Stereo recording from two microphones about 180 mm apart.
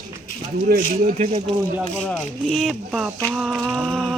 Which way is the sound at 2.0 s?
5° left (ahead or behind).